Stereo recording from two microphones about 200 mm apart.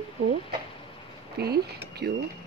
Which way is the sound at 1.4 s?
50° right (ahead or behind).